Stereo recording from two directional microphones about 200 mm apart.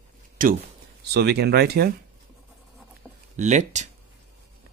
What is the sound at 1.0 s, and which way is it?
Speech, 55° right (ahead or behind).